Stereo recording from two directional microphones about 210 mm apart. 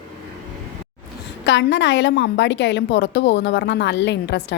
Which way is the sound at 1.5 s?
60° left (ahead or behind).